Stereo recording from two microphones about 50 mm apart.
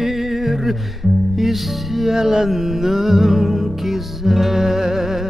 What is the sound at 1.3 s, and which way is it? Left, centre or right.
Music, centre.